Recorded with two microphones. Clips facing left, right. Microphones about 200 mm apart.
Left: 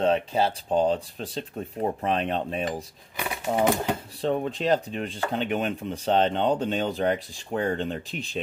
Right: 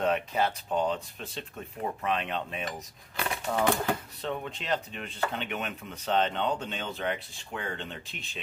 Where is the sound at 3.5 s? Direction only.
15° left (ahead or behind).